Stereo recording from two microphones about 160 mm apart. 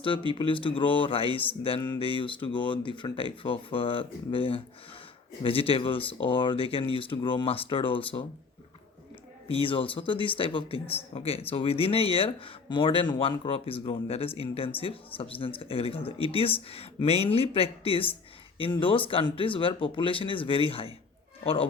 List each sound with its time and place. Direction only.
0.3 s speech: 30° left (ahead or behind)
9.5 s speech: 35° left (ahead or behind)